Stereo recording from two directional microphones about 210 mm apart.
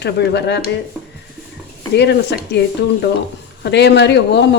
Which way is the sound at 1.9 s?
55° left (ahead or behind).